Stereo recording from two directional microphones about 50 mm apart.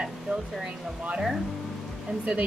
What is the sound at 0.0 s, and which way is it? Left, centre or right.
Stir, centre.